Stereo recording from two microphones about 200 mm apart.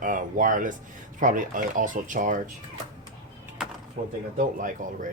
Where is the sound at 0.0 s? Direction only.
40° right (ahead or behind).